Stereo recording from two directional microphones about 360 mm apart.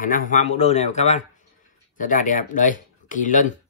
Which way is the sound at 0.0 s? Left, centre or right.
Left.